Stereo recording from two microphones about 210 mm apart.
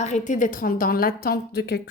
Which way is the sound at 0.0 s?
35° left (ahead or behind).